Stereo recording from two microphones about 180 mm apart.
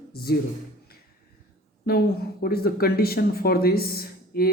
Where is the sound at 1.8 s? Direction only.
55° left (ahead or behind).